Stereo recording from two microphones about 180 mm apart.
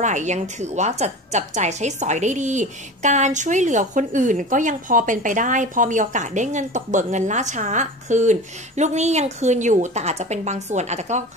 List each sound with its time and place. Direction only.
0.0 s a woman's voice: 40° right (ahead or behind)